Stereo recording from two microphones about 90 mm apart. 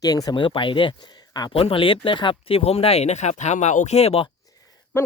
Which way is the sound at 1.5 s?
90° left.